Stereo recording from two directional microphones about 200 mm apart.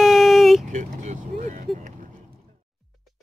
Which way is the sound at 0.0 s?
Centre (ahead or behind).